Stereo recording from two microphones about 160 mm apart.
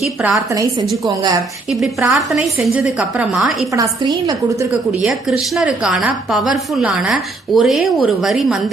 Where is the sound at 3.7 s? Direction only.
20° right (ahead or behind).